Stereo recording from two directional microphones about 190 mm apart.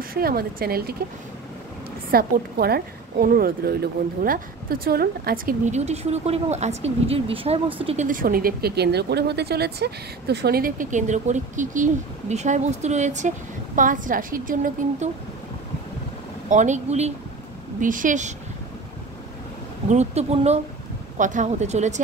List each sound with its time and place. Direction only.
0.1 s speech: 50° right (ahead or behind)
2.0 s speech: 55° right (ahead or behind)
16.4 s speech: 40° right (ahead or behind)
19.9 s speech: 35° right (ahead or behind)